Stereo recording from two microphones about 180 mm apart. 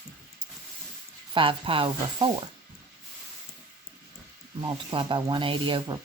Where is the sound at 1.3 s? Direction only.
30° right (ahead or behind).